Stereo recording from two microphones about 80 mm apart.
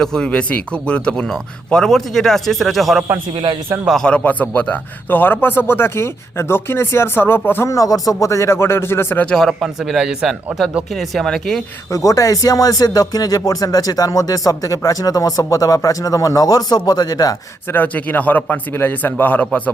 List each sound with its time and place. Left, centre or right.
0.0 s speech: centre
3.3 s speech: right
4.0 s speech: centre
7.7 s speech: left
9.2 s speech: centre
11.9 s speech: left
17.7 s speech: left